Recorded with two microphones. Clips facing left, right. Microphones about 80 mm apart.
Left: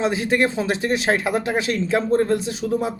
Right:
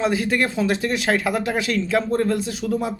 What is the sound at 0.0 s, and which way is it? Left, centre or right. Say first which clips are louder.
Speech: left 1 dB; left.